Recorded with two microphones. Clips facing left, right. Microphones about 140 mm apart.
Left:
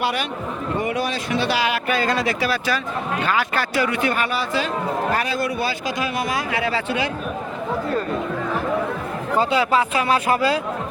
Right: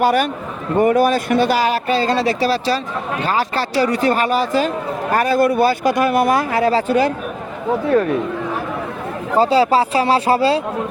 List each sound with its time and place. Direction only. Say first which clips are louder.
0.0 s speech: right 8 dB; 45° right (ahead or behind)
9.4 s speech: right 6 dB; 35° right (ahead or behind)